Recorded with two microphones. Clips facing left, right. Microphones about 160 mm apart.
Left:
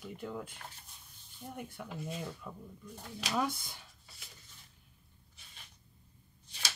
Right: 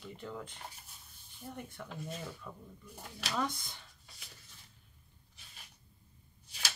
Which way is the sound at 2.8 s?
10° right (ahead or behind).